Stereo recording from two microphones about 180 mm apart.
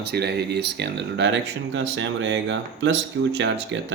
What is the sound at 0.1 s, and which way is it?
Speech, 65° right (ahead or behind).